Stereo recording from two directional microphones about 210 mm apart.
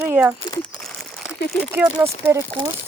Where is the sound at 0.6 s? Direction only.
Centre (ahead or behind).